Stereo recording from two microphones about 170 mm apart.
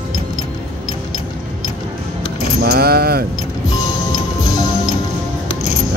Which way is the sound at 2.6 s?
65° right (ahead or behind).